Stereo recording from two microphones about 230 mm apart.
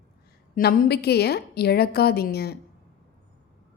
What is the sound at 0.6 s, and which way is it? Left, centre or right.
A woman's voice, left.